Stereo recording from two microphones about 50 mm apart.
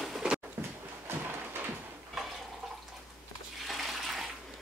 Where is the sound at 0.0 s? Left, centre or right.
Centre.